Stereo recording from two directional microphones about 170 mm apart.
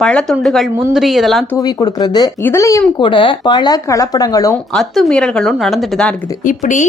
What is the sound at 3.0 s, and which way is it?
Speech, 30° left (ahead or behind).